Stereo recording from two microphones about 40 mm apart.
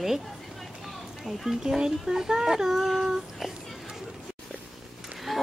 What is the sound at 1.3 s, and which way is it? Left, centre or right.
Speech, centre.